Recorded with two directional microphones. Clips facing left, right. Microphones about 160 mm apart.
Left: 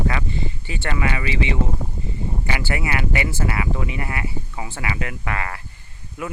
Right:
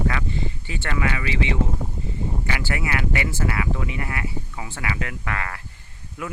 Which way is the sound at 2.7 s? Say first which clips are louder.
Left 1 dB; 15° left (ahead or behind).